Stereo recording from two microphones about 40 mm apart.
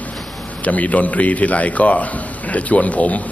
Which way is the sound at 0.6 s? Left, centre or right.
Left.